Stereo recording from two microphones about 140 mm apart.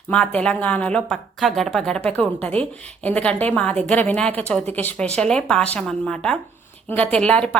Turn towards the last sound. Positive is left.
turn(degrees=10)  # may be behind; listen again after turning